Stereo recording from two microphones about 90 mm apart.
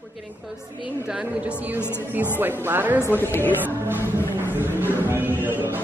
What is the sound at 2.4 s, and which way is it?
Speech, 20° right (ahead or behind).